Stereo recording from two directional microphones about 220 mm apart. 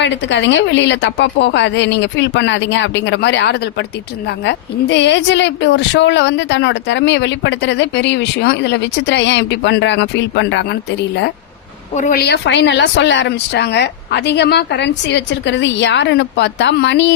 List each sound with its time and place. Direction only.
0.0 s a woman's voice: 55° left (ahead or behind)